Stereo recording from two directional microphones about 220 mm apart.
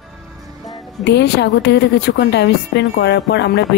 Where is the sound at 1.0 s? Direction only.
50° left (ahead or behind).